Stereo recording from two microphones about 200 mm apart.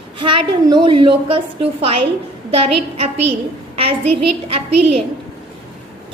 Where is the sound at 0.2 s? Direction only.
25° right (ahead or behind).